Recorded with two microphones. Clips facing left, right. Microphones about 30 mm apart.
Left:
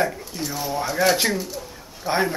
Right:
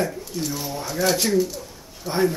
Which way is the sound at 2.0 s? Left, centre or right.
Left.